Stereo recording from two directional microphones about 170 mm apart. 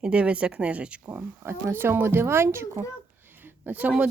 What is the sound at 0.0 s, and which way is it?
Speech, 5° right (ahead or behind).